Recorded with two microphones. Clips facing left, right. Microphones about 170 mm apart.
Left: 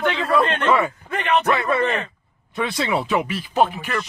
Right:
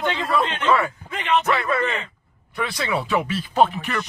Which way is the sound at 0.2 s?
55° left (ahead or behind).